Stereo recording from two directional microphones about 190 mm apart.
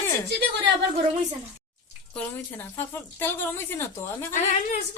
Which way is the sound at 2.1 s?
10° left (ahead or behind).